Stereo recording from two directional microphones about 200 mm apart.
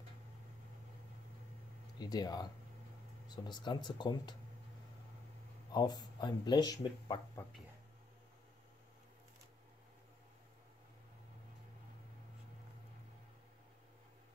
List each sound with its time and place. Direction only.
2.0 s speech: 20° left (ahead or behind)
5.7 s speech: 20° left (ahead or behind)